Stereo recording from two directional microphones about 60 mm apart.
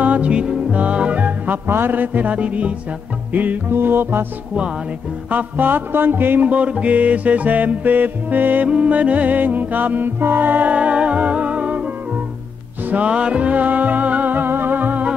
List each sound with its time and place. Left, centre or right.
0.0 s music: right
3.3 s music: right
5.3 s music: right
8.6 s music: centre
12.9 s music: right